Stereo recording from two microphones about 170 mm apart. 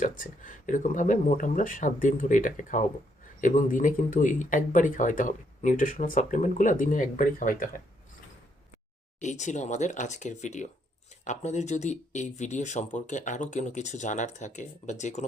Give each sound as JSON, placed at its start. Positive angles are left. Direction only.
{"t": 0.0, "sound": "speech", "side_deg": 50}
{"t": 9.2, "sound": "speech", "side_deg": 45}